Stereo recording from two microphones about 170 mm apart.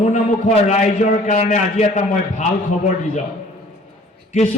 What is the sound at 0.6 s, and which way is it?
A man's voice, 40° left (ahead or behind).